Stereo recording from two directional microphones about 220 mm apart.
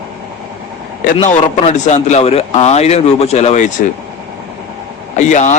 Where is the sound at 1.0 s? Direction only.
35° left (ahead or behind).